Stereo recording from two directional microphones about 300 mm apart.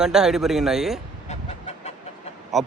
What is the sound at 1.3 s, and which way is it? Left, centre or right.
Chicken, left.